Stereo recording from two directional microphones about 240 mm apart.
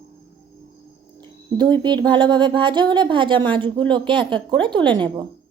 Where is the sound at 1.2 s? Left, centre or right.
Centre.